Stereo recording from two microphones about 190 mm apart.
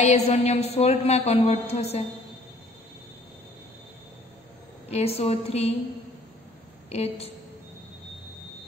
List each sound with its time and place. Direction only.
0.0 s a woman's voice: 35° left (ahead or behind)
4.8 s a woman's voice: 35° left (ahead or behind)
6.9 s a woman's voice: 35° left (ahead or behind)